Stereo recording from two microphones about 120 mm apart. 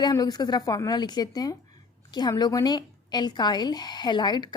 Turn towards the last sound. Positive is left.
turn(degrees=35)  # may be behind; listen again after turning